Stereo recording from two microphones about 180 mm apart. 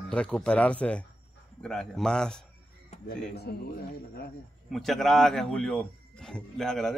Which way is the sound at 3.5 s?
60° left (ahead or behind).